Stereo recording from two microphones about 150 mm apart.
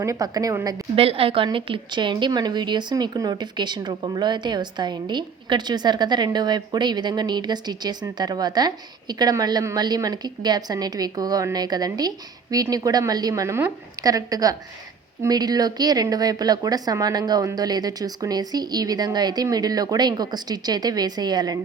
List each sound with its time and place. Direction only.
0.0 s a woman's voice: 20° right (ahead or behind)
0.9 s a woman's voice: 40° right (ahead or behind)